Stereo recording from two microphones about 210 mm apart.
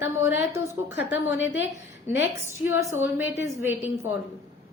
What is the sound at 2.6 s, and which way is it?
A woman's voice, 10° right (ahead or behind).